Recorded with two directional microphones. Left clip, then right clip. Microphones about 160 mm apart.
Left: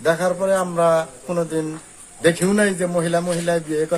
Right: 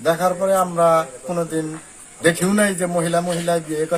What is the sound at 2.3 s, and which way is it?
Speech, 30° left (ahead or behind).